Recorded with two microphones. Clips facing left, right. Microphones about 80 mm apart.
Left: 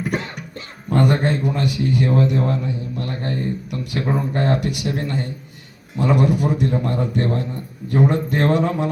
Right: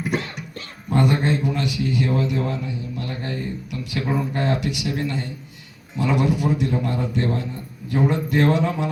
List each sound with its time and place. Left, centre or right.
0.9 s a man's voice: left